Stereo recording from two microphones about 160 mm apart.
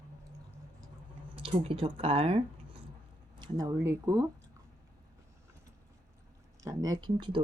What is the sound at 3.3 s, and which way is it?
Speech, 25° right (ahead or behind).